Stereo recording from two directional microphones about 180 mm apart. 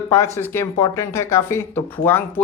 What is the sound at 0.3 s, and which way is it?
Speech, 15° left (ahead or behind).